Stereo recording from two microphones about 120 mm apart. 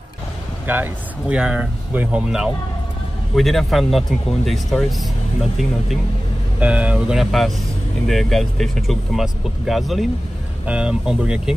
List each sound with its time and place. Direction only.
0.7 s speech: 15° right (ahead or behind)